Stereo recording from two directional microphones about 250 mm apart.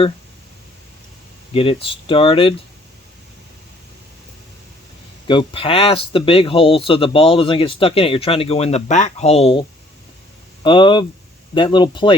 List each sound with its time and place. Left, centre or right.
1.5 s speech: left
5.3 s speech: left